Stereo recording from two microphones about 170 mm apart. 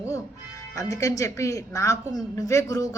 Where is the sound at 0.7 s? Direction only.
20° left (ahead or behind).